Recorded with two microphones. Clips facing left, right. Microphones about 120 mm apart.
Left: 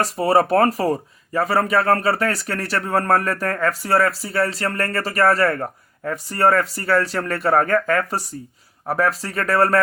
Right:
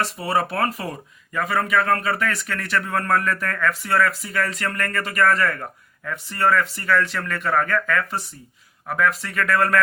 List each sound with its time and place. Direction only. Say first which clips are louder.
0.0 s speech: left 6 dB; 40° left (ahead or behind)